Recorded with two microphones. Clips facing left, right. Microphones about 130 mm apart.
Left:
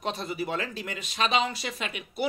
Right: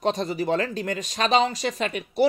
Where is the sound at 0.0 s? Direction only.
40° right (ahead or behind).